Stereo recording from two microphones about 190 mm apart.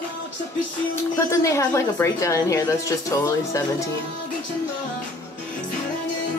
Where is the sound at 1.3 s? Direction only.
15° left (ahead or behind).